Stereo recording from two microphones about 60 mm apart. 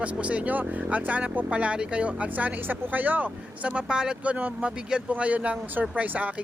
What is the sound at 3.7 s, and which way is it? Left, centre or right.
Speech, centre.